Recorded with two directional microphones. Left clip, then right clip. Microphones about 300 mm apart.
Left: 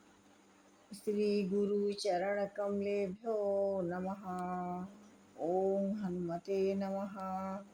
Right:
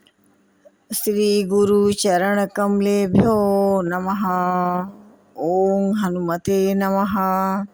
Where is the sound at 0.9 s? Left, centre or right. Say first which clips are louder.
Right 16 dB; right.